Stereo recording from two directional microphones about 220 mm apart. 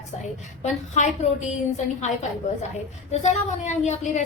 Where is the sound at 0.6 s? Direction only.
35° left (ahead or behind).